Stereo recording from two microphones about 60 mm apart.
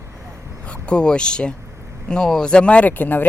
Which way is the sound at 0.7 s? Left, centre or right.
Centre.